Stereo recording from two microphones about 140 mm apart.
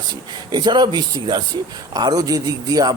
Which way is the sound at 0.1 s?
30° right (ahead or behind).